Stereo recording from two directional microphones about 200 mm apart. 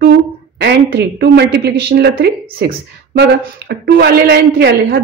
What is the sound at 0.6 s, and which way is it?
A woman's voice, 55° right (ahead or behind).